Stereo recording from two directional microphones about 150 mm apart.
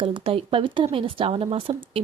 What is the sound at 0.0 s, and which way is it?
A woman's voice, 35° right (ahead or behind).